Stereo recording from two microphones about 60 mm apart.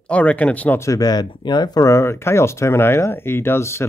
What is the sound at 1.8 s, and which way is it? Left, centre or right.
Speech, left.